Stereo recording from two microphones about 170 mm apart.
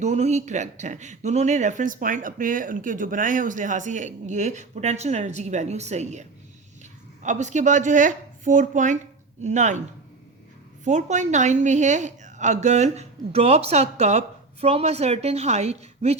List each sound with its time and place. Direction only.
0.0 s speech: 45° right (ahead or behind)
10.8 s a woman's voice: 45° right (ahead or behind)